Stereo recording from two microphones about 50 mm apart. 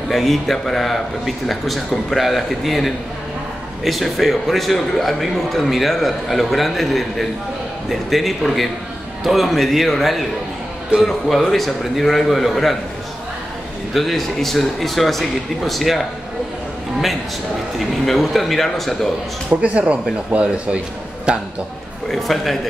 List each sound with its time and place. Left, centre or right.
0.1 s a man's voice: centre
13.9 s a man's voice: centre
17.7 s a man's voice: centre
19.6 s speech: right
22.0 s a man's voice: centre